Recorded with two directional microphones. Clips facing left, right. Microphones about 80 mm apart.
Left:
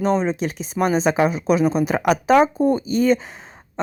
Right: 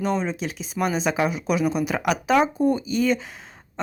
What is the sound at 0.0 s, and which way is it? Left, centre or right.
Speech, left.